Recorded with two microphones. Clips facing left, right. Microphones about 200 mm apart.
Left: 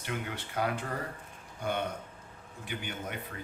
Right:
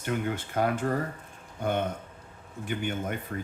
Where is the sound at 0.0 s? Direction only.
45° right (ahead or behind).